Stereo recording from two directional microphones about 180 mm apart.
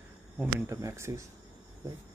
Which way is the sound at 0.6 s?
15° right (ahead or behind).